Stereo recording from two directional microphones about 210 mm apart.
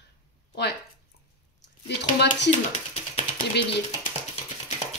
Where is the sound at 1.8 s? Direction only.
55° left (ahead or behind).